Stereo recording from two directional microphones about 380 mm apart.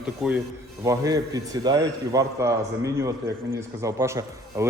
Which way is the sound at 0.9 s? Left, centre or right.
Centre.